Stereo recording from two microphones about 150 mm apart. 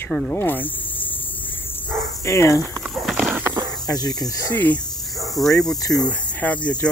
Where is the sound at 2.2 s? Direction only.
20° left (ahead or behind).